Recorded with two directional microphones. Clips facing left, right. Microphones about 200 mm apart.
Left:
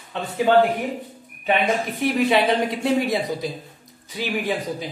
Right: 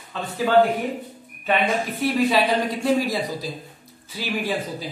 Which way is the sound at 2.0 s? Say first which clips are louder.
Left 1 dB; 20° left (ahead or behind).